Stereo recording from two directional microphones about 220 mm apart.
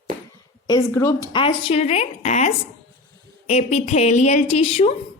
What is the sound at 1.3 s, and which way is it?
A woman's voice, 25° left (ahead or behind).